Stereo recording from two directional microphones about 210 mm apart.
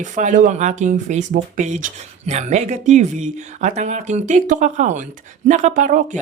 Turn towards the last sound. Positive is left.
turn(degrees=-40)  # may be behind; listen again after turning